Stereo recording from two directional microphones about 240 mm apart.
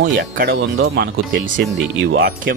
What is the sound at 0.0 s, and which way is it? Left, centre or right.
Speech, right.